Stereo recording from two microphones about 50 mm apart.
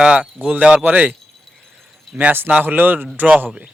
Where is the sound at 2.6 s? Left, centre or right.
Right.